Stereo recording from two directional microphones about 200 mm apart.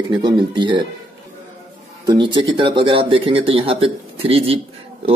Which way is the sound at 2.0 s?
20° right (ahead or behind).